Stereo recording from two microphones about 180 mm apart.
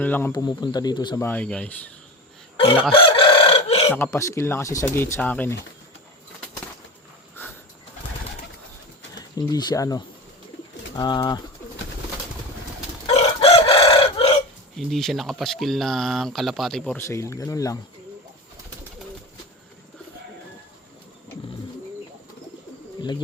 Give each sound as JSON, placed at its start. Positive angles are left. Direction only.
{"t": 0.0, "sound": "speech", "side_deg": 10}
{"t": 1.2, "sound": "speech", "side_deg": 10}
{"t": 2.9, "sound": "chicken", "side_deg": 30}
{"t": 3.9, "sound": "speech", "side_deg": 15}
{"t": 7.4, "sound": "a sound", "side_deg": 10}
{"t": 9.5, "sound": "speech", "side_deg": 20}
{"t": 13.1, "sound": "chicken", "side_deg": 35}
{"t": 14.8, "sound": "speech", "side_deg": 0}